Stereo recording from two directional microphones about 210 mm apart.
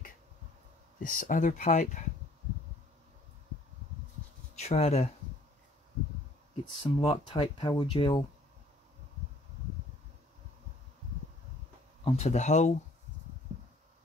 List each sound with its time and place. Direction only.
1.0 s speech: 40° left (ahead or behind)
4.6 s speech: 30° left (ahead or behind)
6.8 s speech: 25° left (ahead or behind)
12.0 s speech: 35° left (ahead or behind)